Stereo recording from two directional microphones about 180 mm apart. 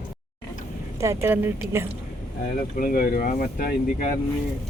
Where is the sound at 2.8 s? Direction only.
55° left (ahead or behind).